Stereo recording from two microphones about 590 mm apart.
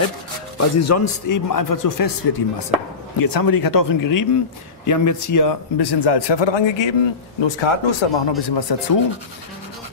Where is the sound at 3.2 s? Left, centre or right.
Left.